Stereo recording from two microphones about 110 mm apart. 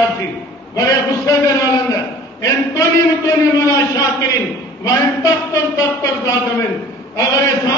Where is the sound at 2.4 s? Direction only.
30° left (ahead or behind).